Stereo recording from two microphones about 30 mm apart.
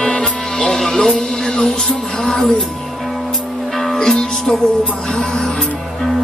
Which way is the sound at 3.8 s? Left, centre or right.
Centre.